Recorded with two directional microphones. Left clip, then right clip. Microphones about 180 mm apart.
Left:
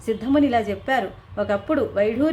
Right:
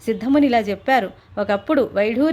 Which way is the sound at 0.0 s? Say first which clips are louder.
Right 2 dB; 35° right (ahead or behind).